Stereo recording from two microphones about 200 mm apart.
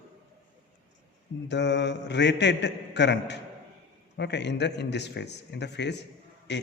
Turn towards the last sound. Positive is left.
turn(degrees=60)  # may be behind; listen again after turning